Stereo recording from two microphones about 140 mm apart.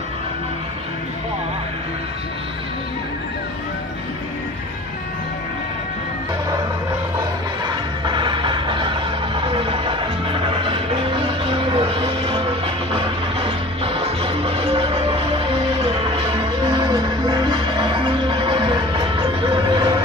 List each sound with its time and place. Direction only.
7.6 s music: 35° right (ahead or behind)